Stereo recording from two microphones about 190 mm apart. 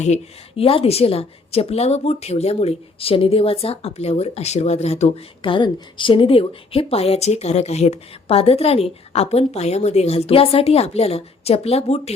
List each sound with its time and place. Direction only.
0.0 s a woman's voice: 35° left (ahead or behind)